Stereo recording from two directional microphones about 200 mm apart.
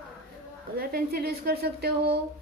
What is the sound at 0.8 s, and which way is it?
A woman's voice, 50° right (ahead or behind).